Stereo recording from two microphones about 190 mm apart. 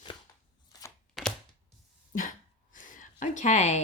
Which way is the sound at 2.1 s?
45° left (ahead or behind).